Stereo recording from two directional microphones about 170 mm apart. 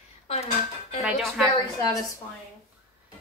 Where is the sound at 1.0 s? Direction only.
Centre (ahead or behind).